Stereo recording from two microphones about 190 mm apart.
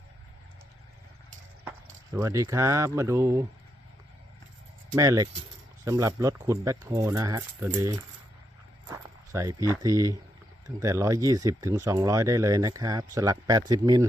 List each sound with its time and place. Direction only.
2.1 s speech: 15° right (ahead or behind)
4.9 s speech: 15° right (ahead or behind)
8.9 s walk: 15° right (ahead or behind)
9.8 s speech: 15° right (ahead or behind)